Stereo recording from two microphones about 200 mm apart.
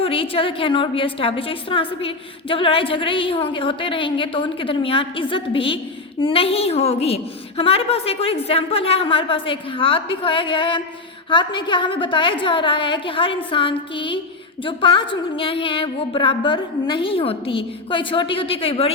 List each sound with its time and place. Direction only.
0.0 s a woman's voice: 25° left (ahead or behind)